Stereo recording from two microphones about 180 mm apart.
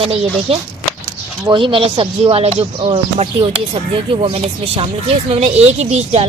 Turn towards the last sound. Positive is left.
turn(degrees=-35)  # may be behind; listen again after turning